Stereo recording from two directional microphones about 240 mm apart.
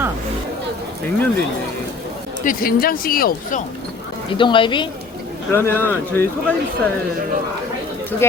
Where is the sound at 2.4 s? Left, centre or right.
Left.